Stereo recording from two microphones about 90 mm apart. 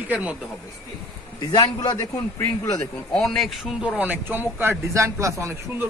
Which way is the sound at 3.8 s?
15° right (ahead or behind).